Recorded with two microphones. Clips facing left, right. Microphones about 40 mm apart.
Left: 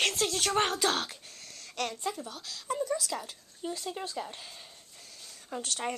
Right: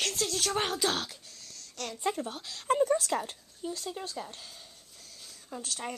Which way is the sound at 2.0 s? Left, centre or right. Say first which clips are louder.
Right 4 dB; right.